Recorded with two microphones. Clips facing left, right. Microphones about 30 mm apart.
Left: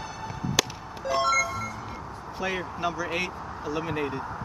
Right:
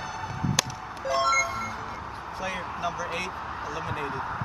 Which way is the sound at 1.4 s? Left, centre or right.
Right.